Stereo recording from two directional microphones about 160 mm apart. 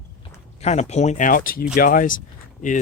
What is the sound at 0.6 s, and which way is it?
Speech, 45° left (ahead or behind).